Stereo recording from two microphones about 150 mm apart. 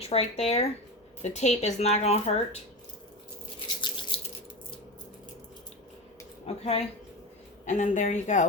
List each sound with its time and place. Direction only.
0.0 s speech: 40° left (ahead or behind)
3.8 s drip: 30° left (ahead or behind)
6.4 s speech: 45° left (ahead or behind)
7.6 s speech: 55° left (ahead or behind)